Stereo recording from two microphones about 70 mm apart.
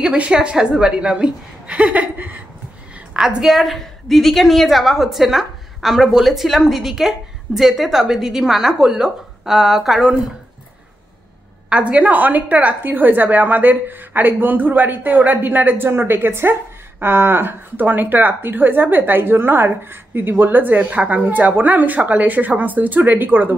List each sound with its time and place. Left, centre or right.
0.0 s a woman's voice: centre
3.1 s a woman's voice: centre
11.7 s a woman's voice: centre